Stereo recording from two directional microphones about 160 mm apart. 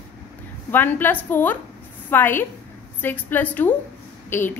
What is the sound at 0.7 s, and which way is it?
A woman's voice, 10° left (ahead or behind).